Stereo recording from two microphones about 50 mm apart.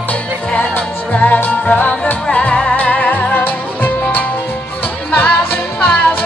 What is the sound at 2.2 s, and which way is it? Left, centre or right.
Music, left.